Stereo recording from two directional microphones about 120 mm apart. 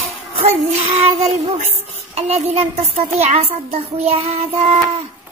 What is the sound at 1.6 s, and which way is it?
A child's voice, 65° right (ahead or behind).